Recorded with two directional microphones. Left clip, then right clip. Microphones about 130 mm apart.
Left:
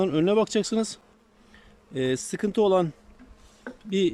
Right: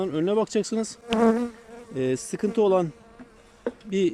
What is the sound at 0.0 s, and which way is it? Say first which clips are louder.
Speech: left 2 dB; 10° left (ahead or behind).